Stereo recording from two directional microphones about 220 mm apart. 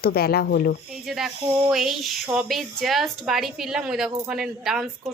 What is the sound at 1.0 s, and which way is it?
A woman's voice, centre (ahead or behind).